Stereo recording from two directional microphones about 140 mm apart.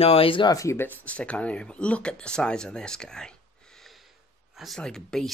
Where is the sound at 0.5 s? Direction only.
20° left (ahead or behind).